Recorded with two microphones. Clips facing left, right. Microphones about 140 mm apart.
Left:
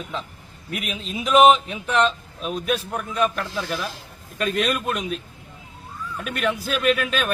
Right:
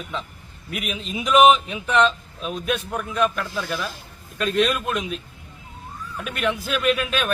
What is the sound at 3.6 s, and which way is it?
Speech, 45° left (ahead or behind).